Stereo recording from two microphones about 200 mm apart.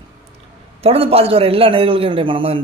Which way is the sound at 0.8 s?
30° right (ahead or behind).